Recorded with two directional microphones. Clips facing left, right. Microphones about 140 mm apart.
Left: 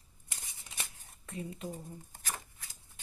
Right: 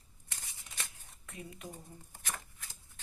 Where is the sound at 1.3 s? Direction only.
30° left (ahead or behind).